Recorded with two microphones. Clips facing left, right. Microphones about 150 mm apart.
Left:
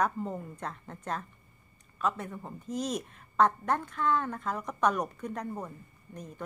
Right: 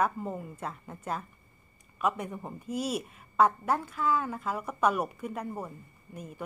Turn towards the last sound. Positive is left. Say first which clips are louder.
# right 1 dB
turn(degrees=-10)  # may be behind; listen again after turning